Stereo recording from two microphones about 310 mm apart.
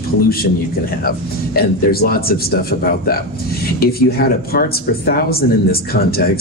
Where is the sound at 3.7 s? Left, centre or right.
Left.